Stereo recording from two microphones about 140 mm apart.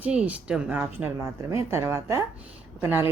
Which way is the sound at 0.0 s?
10° right (ahead or behind).